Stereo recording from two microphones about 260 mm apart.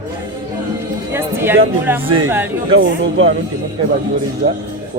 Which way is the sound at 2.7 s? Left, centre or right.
Right.